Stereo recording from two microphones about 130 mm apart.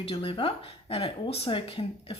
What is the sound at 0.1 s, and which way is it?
Speech, 45° left (ahead or behind).